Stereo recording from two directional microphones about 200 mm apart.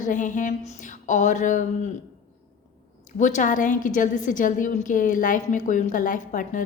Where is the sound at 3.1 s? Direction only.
40° left (ahead or behind).